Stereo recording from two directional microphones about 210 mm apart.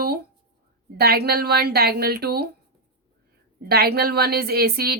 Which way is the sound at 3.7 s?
50° right (ahead or behind).